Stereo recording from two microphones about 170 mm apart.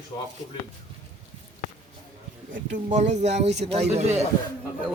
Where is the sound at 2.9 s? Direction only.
45° right (ahead or behind).